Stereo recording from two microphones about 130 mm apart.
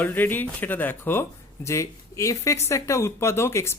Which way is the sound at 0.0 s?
15° left (ahead or behind).